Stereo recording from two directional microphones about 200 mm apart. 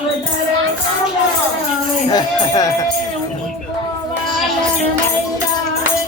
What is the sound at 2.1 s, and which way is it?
Speech, 20° left (ahead or behind).